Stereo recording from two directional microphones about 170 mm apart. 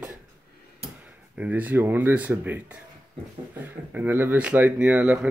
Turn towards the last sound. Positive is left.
turn(degrees=-10)  # may be behind; listen again after turning